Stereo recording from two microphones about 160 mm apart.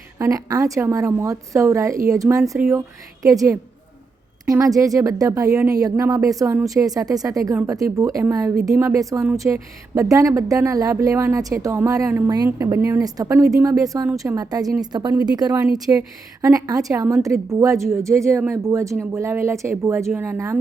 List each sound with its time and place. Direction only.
0.2 s a woman's voice: 20° right (ahead or behind)